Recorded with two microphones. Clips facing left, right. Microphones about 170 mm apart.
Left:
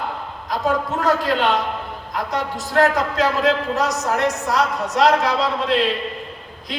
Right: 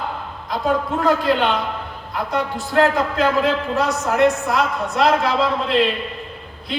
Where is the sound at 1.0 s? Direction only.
40° left (ahead or behind).